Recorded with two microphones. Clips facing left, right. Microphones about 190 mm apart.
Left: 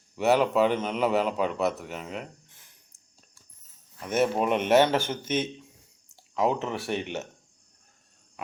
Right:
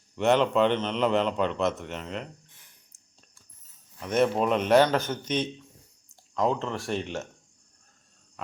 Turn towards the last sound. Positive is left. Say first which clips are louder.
# even
turn(degrees=0)  # may be behind; listen again after turning